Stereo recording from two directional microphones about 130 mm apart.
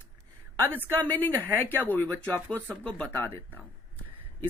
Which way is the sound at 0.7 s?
15° right (ahead or behind).